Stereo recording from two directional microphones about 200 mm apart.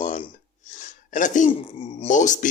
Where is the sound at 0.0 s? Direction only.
35° left (ahead or behind).